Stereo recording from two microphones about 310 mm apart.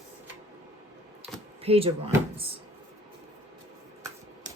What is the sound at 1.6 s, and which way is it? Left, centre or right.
Speech, centre.